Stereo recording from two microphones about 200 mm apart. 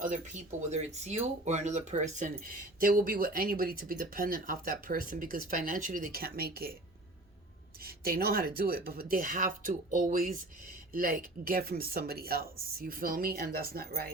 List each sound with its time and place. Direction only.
0.0 s speech: 40° right (ahead or behind)
7.8 s speech: 50° right (ahead or behind)